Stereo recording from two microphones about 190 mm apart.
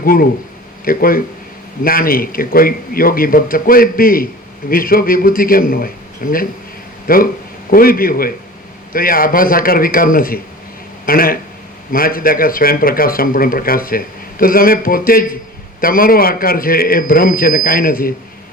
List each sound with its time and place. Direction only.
0.0 s a man's voice: 50° left (ahead or behind)